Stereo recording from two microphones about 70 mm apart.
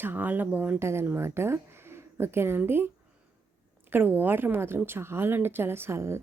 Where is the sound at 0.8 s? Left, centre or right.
Right.